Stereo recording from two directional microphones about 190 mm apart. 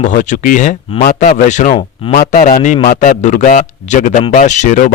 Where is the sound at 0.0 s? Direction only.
40° left (ahead or behind).